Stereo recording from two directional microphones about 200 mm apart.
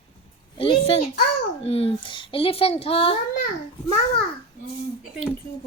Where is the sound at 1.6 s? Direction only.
30° left (ahead or behind).